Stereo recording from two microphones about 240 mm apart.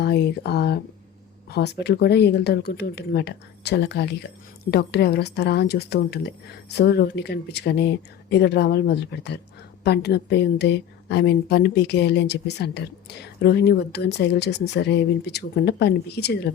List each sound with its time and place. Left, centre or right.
0.0 s a woman's voice: left